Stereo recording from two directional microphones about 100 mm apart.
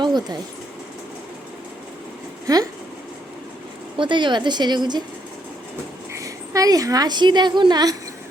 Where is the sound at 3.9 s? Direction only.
55° right (ahead or behind).